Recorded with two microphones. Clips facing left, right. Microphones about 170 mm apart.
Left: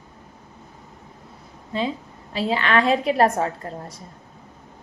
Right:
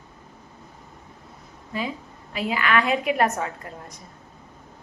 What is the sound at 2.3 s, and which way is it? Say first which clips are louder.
A woman's voice: left 2 dB; 30° left (ahead or behind).